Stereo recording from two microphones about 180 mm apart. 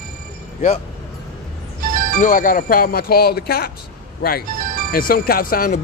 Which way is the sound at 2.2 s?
45° left (ahead or behind).